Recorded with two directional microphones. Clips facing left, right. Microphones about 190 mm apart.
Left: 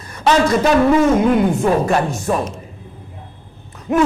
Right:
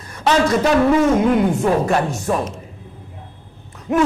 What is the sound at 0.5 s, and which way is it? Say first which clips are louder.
A man's voice: left 1 dB; 20° left (ahead or behind).